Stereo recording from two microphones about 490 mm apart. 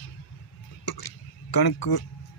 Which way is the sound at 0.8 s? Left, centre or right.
Left.